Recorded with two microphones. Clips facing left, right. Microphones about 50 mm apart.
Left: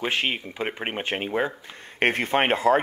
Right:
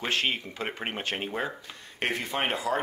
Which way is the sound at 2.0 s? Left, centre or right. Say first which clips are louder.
Left 7 dB; left.